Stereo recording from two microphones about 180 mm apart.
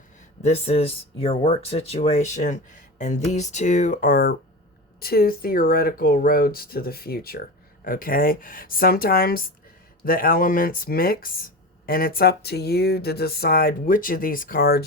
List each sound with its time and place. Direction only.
0.4 s speech: 35° left (ahead or behind); by 14.8 s 60° left (ahead or behind)